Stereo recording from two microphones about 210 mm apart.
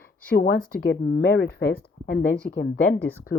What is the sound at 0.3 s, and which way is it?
A woman's voice, 50° left (ahead or behind).